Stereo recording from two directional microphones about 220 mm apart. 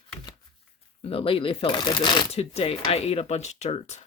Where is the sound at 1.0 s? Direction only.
25° left (ahead or behind).